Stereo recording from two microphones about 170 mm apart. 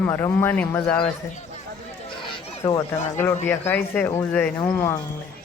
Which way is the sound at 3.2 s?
10° left (ahead or behind).